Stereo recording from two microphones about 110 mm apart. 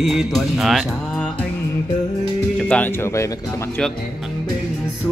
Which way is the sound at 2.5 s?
10° left (ahead or behind).